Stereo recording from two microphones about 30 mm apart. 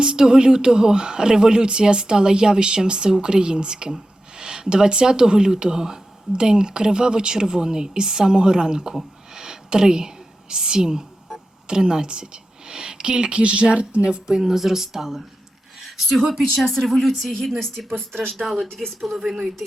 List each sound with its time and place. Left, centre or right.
0.0 s a woman's voice: right
8.9 s whispering: centre
10.5 s a woman's voice: right
14.3 s speech: centre
16.0 s speech: centre
16.3 s speech: centre
16.6 s speech: centre
18.4 s speech: centre